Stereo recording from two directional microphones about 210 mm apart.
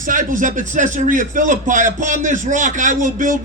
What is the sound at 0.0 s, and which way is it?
A man's voice, 40° right (ahead or behind).